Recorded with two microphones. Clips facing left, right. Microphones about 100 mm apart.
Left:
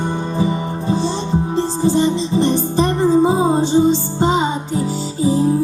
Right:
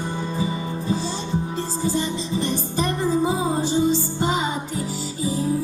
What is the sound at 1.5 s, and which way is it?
Music, 25° left (ahead or behind).